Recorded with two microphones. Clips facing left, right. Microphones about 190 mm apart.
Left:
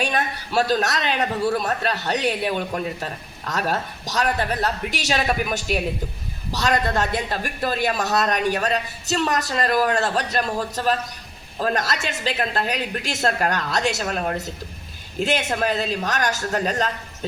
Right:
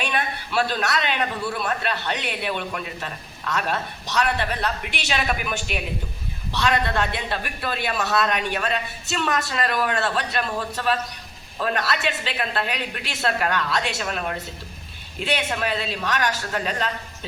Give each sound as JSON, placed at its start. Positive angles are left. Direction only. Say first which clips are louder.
{"t": 0.0, "sound": "a man's voice", "louder": "left 2 dB", "side_deg": 40}